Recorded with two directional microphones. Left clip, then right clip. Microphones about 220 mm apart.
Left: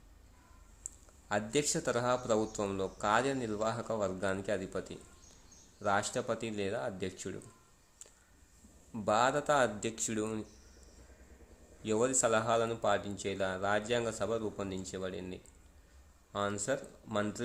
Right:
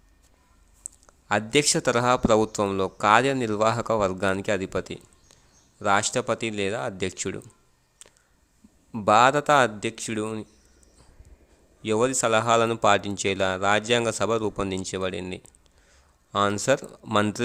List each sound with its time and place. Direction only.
1.3 s a man's voice: 30° right (ahead or behind)
8.9 s a man's voice: 30° right (ahead or behind)
11.8 s a man's voice: 25° right (ahead or behind)